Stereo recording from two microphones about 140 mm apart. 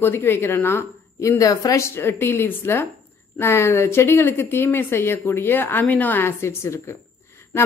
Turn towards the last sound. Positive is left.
turn(degrees=20)  # may be behind; listen again after turning